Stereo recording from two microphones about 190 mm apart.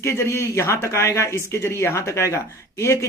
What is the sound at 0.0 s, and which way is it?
Speech, 15° left (ahead or behind).